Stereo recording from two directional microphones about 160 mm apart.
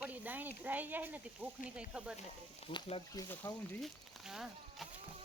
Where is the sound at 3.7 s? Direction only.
Centre (ahead or behind).